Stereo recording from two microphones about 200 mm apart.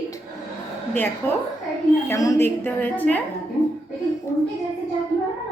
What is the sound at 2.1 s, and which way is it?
A woman's voice, 15° left (ahead or behind).